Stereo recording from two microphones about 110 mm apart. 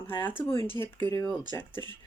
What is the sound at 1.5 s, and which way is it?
Speech, 20° left (ahead or behind).